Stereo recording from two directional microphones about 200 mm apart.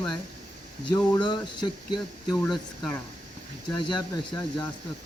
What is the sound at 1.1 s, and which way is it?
Speech, 20° left (ahead or behind).